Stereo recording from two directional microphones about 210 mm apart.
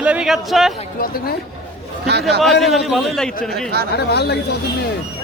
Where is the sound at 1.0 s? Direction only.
45° left (ahead or behind).